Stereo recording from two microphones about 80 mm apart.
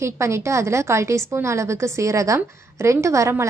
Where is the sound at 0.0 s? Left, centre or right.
Right.